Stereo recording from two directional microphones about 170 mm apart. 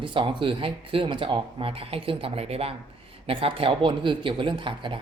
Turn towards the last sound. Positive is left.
turn(degrees=-30)  # may be behind; listen again after turning